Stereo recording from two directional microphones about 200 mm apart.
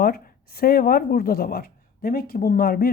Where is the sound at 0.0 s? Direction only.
50° left (ahead or behind).